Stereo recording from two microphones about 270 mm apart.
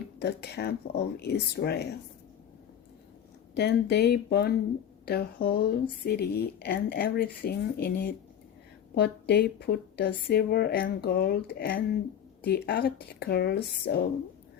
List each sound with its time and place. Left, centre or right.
0.2 s speech: left
3.5 s speech: left